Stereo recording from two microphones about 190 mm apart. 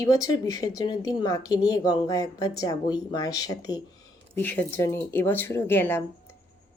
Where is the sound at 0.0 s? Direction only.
20° left (ahead or behind).